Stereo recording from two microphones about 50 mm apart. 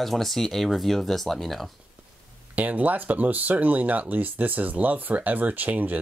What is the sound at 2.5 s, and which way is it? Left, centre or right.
Speech, right.